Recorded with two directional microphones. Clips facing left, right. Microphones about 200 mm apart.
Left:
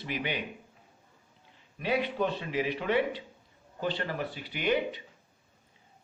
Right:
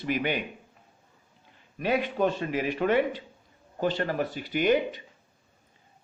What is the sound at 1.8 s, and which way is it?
A man's voice, 50° right (ahead or behind).